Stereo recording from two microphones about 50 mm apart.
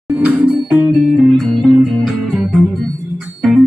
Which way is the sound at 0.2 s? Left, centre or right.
Right.